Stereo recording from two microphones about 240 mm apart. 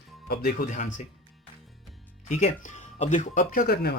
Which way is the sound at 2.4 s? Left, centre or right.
Left.